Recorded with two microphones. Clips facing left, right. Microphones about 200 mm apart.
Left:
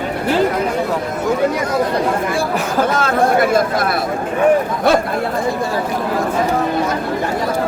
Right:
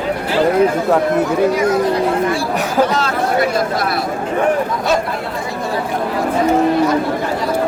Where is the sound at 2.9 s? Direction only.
50° left (ahead or behind).